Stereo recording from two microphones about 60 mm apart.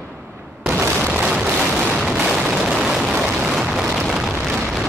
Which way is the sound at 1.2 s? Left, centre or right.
Centre.